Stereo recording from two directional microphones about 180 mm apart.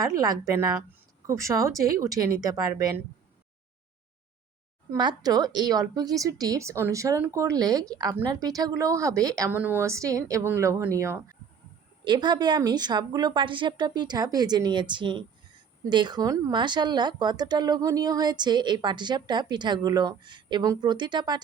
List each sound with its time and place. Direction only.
0.0 s speech: 20° right (ahead or behind)
4.9 s speech: 20° right (ahead or behind)
12.0 s speech: 25° right (ahead or behind)